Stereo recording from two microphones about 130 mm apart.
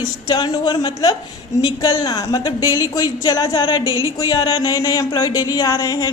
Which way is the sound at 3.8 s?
25° right (ahead or behind).